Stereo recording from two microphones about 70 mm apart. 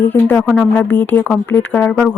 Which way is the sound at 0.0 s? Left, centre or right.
Left.